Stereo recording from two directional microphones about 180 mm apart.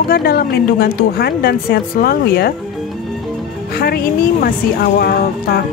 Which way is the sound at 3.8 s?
60° left (ahead or behind).